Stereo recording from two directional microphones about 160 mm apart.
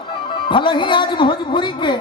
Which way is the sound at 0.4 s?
30° left (ahead or behind).